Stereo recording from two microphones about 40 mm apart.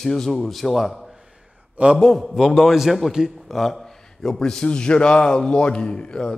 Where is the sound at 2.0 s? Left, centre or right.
Centre.